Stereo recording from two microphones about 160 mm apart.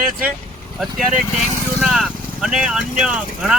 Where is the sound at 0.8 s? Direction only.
Centre (ahead or behind).